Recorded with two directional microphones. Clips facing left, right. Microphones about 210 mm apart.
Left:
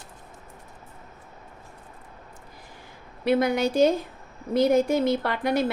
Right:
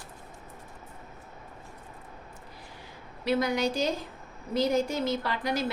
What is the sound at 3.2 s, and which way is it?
A woman's voice, 55° left (ahead or behind).